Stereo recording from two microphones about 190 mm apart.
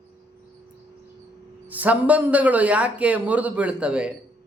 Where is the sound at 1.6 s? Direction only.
10° right (ahead or behind).